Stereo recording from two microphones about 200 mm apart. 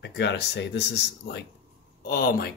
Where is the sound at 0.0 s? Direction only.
60° left (ahead or behind).